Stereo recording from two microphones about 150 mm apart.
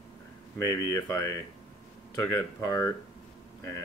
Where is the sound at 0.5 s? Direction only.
20° left (ahead or behind).